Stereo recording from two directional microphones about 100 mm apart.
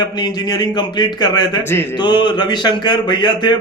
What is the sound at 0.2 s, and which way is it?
Speech, 45° left (ahead or behind).